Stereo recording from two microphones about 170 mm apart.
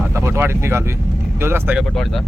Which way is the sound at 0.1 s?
15° right (ahead or behind).